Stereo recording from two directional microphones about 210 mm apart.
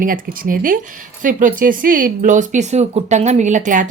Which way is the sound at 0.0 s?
40° right (ahead or behind).